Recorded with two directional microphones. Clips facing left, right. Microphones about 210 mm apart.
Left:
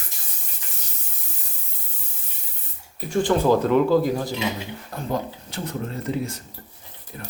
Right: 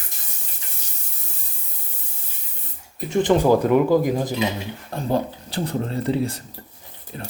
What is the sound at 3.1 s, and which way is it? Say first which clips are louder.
Speech: right 2 dB; 20° right (ahead or behind).